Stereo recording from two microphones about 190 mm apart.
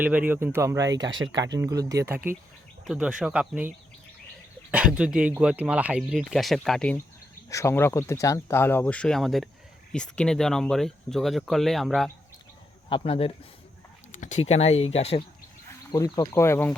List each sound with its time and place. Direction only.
0.0 s speech: 10° right (ahead or behind)
4.7 s speech: 5° right (ahead or behind)
12.9 s speech: 30° left (ahead or behind)
15.9 s speech: 20° left (ahead or behind)